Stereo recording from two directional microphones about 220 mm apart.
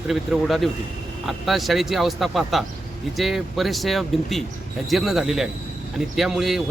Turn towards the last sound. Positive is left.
turn(degrees=0)  # may be behind; listen again after turning